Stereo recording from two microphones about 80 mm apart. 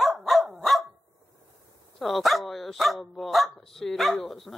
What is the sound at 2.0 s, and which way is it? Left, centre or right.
Speech, centre.